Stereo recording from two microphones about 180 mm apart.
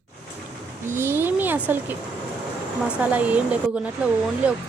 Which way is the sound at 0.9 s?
15° right (ahead or behind).